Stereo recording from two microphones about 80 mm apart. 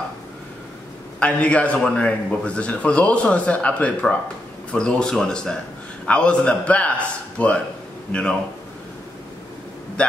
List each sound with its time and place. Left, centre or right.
1.2 s a man's voice: centre
10.0 s a man's voice: centre